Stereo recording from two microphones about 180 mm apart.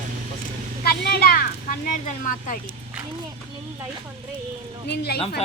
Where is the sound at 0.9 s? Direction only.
60° left (ahead or behind).